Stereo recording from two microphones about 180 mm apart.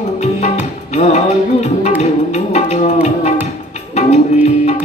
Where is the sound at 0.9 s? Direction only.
40° left (ahead or behind).